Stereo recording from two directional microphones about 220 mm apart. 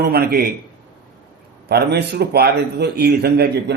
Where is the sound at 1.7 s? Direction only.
45° right (ahead or behind).